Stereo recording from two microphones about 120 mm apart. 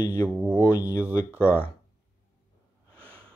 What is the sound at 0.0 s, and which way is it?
Speech, 25° left (ahead or behind).